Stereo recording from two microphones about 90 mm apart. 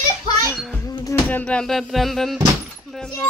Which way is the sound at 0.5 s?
Centre (ahead or behind).